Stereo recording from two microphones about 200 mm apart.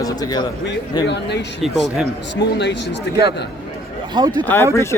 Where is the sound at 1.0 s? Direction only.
60° left (ahead or behind).